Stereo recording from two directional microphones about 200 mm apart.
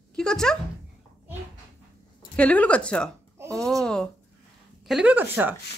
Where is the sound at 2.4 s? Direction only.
5° left (ahead or behind); by 5.5 s 10° right (ahead or behind).